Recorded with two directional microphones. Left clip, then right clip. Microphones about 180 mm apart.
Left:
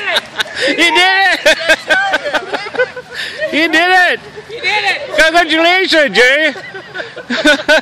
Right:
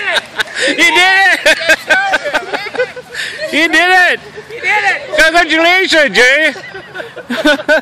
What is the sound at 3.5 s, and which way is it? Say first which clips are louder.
Speech: right 1 dB; centre (ahead or behind).